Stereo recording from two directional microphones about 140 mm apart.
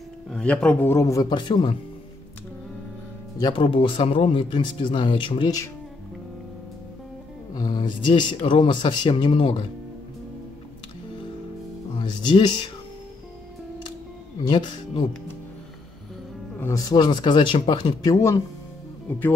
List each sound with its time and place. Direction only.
0.3 s speech: 5° left (ahead or behind); by 1.8 s 30° left (ahead or behind)
3.3 s speech: 35° left (ahead or behind)
7.5 s speech: 30° left (ahead or behind)
12.0 s speech: 35° left (ahead or behind)
16.5 s speech: 20° left (ahead or behind)
16.9 s speech: 35° left (ahead or behind)
19.0 s speech: 15° left (ahead or behind)